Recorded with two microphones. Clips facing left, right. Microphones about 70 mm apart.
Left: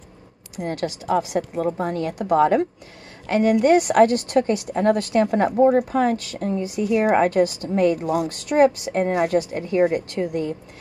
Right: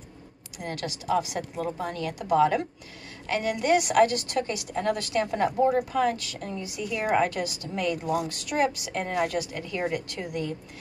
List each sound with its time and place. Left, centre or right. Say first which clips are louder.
0.6 s a woman's voice: left 7 dB; left